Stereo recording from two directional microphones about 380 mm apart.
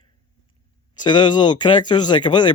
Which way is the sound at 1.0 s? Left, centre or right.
Centre.